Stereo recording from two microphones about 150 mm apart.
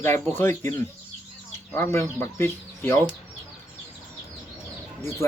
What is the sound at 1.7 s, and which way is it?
Speech, 15° left (ahead or behind).